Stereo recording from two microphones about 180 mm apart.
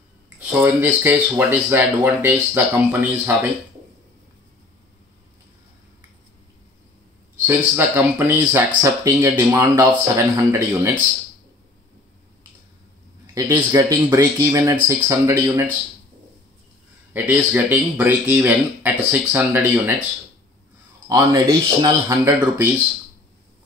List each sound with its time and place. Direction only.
0.5 s speech: 10° right (ahead or behind)
7.4 s speech: 10° right (ahead or behind)
13.3 s speech: 20° right (ahead or behind)
17.1 s speech: 10° right (ahead or behind)
21.1 s speech: 20° right (ahead or behind)